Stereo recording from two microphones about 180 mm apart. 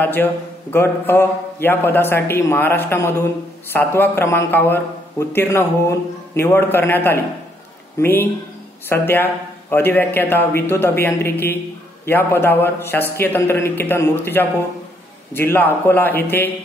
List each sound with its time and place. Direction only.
0.0 s a man's voice: 10° left (ahead or behind)